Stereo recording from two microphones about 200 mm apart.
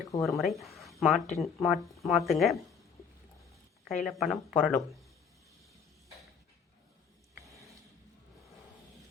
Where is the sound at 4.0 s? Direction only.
Centre (ahead or behind).